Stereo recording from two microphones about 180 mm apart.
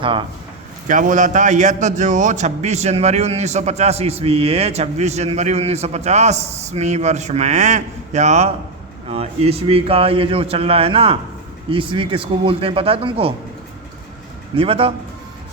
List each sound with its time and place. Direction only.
0.0 s speech: 25° right (ahead or behind)
0.9 s a man's voice: 45° right (ahead or behind)
14.5 s a man's voice: 30° right (ahead or behind)